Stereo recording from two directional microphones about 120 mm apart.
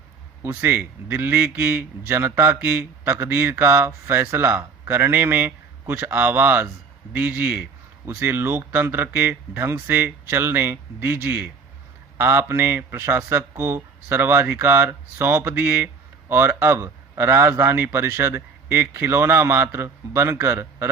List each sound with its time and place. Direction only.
0.4 s a man's voice: 20° right (ahead or behind)